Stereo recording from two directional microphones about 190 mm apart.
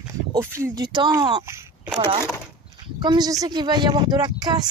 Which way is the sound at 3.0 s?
20° right (ahead or behind).